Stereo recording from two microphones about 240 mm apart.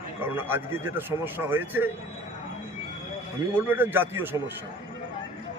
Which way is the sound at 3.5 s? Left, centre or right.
Centre.